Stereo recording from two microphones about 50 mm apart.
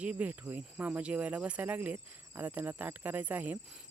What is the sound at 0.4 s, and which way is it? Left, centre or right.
Speech, right.